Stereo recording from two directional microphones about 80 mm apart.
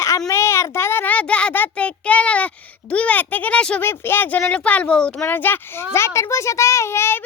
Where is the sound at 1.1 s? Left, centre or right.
Centre.